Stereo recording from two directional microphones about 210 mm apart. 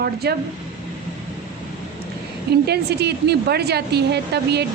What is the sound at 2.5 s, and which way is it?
A woman's voice, 50° right (ahead or behind).